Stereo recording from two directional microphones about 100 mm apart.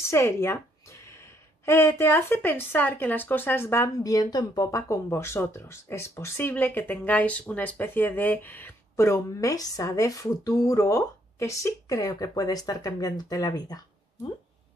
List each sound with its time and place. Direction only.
0.1 s speech: 25° left (ahead or behind)
1.7 s speech: 25° left (ahead or behind)
3.9 s speech: 40° left (ahead or behind)